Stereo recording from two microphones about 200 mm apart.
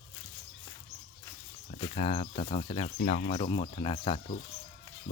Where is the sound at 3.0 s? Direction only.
40° left (ahead or behind).